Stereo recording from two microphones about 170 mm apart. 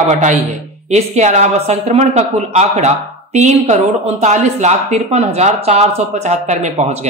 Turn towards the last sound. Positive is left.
turn(degrees=-40)  # may be behind; listen again after turning